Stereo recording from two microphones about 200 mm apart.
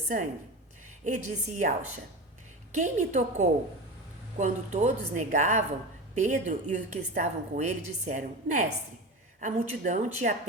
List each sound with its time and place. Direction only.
0.9 s a woman's voice: 40° right (ahead or behind)
2.7 s a woman's voice: 40° right (ahead or behind)